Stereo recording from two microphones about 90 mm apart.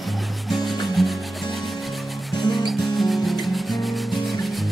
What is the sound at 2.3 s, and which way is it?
Music, centre (ahead or behind).